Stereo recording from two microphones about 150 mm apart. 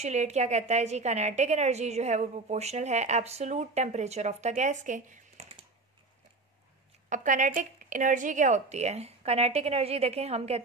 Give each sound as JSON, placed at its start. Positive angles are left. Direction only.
{"t": 0.0, "sound": "a woman's voice", "side_deg": -50}
{"t": 7.1, "sound": "a woman's voice", "side_deg": -60}